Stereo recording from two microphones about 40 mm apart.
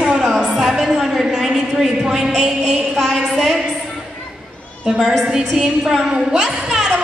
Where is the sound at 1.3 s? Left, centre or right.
Centre.